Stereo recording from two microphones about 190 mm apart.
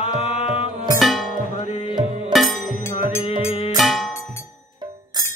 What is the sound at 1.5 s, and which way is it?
Music, 35° left (ahead or behind).